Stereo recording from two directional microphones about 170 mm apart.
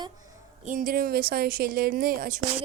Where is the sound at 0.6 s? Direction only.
50° right (ahead or behind).